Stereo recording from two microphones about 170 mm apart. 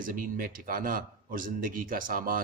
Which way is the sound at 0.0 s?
55° right (ahead or behind).